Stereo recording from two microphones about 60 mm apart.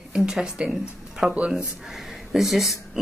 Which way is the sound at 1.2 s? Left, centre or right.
Centre.